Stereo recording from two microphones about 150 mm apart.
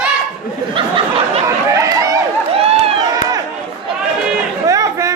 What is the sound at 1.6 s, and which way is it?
Chatter, 20° right (ahead or behind).